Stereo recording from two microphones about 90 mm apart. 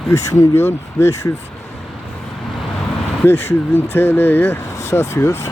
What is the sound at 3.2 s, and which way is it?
Speech, 25° left (ahead or behind).